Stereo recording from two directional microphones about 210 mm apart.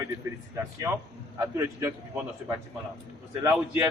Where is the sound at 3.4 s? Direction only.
10° right (ahead or behind).